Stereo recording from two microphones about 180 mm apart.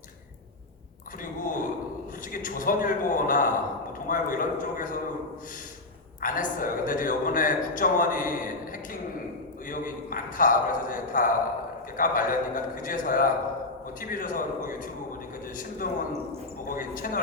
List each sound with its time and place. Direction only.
1.2 s a sound: 50° left (ahead or behind)
2.3 s speech: 50° left (ahead or behind)
6.1 s speech: 50° left (ahead or behind)
9.6 s speech: 50° left (ahead or behind)